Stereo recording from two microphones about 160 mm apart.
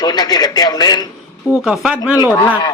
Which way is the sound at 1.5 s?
5° right (ahead or behind).